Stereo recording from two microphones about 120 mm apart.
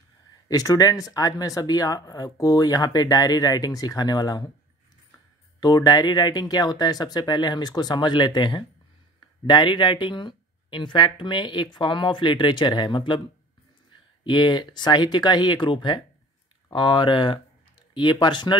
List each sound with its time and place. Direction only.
0.5 s speech: 30° left (ahead or behind)
5.6 s speech: 35° left (ahead or behind)
14.2 s speech: 40° left (ahead or behind)